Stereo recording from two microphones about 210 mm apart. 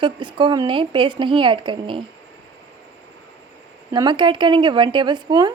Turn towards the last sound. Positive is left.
turn(degrees=-20)  # may be behind; listen again after turning